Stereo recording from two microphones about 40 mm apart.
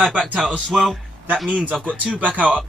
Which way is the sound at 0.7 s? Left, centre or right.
Centre.